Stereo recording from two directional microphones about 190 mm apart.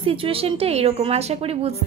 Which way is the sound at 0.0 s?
30° right (ahead or behind).